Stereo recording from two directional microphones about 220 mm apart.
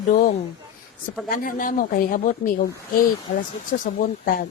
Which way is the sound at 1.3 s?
40° left (ahead or behind).